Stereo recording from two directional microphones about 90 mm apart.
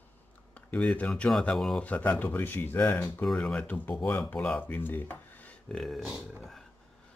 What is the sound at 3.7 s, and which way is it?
Speech, 20° left (ahead or behind).